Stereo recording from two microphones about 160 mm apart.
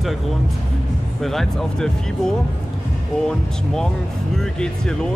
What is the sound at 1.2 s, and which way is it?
Speech, centre (ahead or behind).